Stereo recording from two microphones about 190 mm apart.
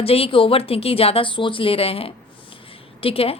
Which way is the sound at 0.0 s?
30° left (ahead or behind).